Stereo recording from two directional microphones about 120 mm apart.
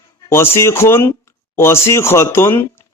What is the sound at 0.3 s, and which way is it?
Speech, 20° left (ahead or behind).